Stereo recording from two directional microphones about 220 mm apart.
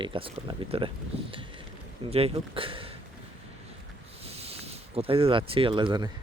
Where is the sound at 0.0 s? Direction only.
25° right (ahead or behind).